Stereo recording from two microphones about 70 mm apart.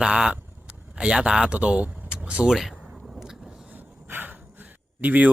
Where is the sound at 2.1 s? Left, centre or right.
Centre.